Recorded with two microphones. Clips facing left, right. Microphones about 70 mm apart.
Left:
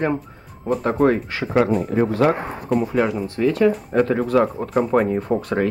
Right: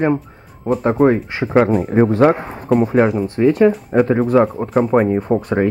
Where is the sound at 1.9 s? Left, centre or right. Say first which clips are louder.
Right 5 dB; right.